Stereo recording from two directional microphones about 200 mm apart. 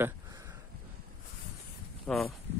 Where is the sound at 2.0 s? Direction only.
Centre (ahead or behind).